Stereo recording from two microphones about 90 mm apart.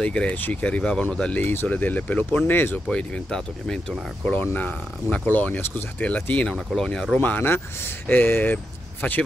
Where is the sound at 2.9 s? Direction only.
10° left (ahead or behind).